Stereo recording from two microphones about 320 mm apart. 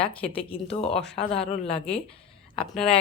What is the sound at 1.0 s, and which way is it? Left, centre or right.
Speech, centre.